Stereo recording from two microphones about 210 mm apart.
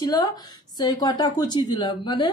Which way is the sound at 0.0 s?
20° left (ahead or behind).